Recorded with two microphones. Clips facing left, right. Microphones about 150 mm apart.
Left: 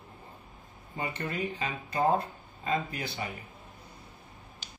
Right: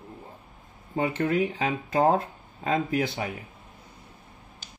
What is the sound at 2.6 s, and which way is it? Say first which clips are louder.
Speech: right 7 dB; 75° right (ahead or behind).